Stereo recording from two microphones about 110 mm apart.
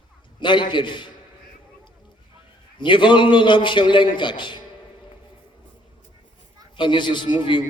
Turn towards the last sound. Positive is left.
turn(degrees=45)  # may be behind; listen again after turning